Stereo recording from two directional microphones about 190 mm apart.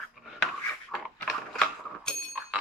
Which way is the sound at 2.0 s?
Centre (ahead or behind).